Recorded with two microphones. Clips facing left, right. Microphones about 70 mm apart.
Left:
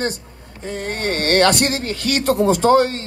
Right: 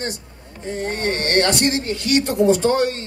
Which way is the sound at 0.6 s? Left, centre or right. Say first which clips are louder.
Even; left.